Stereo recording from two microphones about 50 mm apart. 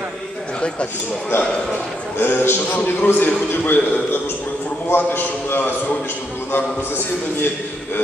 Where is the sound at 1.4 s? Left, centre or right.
Centre.